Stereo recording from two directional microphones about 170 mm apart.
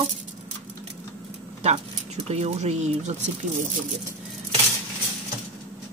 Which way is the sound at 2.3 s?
40° right (ahead or behind).